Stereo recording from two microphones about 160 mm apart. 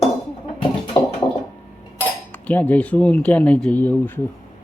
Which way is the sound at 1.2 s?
20° left (ahead or behind).